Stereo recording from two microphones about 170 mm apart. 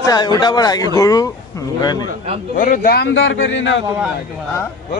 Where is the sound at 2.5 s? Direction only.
55° left (ahead or behind).